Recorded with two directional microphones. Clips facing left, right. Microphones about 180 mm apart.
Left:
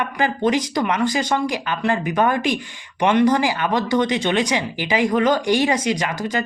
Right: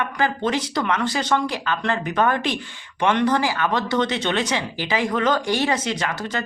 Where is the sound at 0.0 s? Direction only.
15° left (ahead or behind).